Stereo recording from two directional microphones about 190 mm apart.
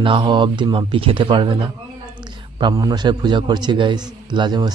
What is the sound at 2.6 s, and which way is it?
Speech, 20° right (ahead or behind).